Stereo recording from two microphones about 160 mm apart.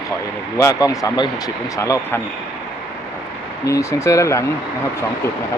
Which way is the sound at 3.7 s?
20° left (ahead or behind).